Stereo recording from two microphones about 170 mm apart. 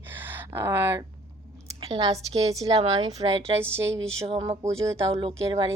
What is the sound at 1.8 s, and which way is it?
A woman's voice, 30° right (ahead or behind).